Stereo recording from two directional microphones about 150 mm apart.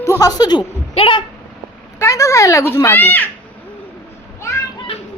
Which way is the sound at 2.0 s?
20° left (ahead or behind).